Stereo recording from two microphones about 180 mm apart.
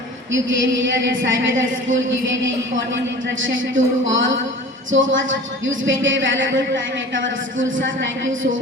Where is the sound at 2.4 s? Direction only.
90° right.